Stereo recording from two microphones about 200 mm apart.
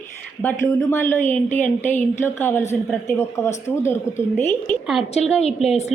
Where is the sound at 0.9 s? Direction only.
10° left (ahead or behind).